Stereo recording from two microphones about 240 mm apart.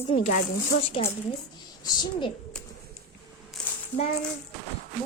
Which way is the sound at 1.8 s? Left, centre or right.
Centre.